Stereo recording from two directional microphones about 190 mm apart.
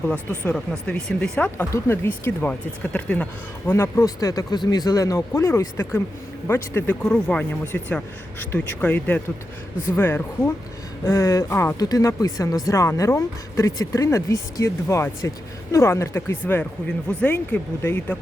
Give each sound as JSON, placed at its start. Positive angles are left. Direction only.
{"t": 0.1, "sound": "speech", "side_deg": 5}